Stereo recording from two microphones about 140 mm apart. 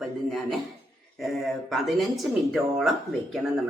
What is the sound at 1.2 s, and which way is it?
Speech, centre (ahead or behind).